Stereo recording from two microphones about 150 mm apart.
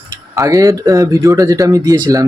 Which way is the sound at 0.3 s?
20° right (ahead or behind).